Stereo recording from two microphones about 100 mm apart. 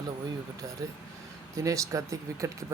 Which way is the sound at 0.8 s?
35° right (ahead or behind).